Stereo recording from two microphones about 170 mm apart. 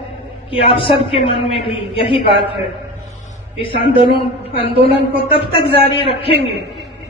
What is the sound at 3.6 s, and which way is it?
A man's voice, 30° left (ahead or behind).